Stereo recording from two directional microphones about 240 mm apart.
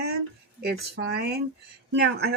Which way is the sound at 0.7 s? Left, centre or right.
Right.